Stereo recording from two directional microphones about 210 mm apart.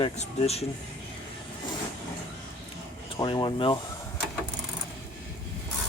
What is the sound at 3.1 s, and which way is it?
Speech, 25° left (ahead or behind).